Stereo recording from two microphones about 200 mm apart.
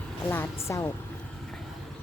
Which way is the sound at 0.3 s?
10° left (ahead or behind).